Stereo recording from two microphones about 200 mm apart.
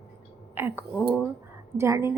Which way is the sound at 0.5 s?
10° right (ahead or behind).